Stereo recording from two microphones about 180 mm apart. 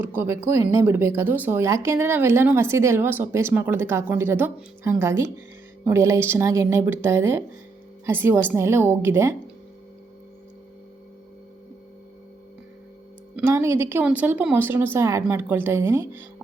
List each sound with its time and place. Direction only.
0.0 s speech: 10° right (ahead or behind)
13.3 s speech: 15° right (ahead or behind)